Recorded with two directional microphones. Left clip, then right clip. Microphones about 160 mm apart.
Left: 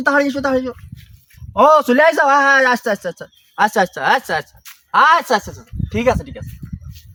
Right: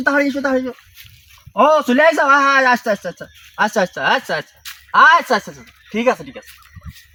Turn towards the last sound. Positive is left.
turn(degrees=10)  # may be behind; listen again after turning